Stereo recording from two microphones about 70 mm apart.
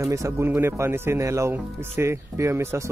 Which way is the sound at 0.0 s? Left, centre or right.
Right.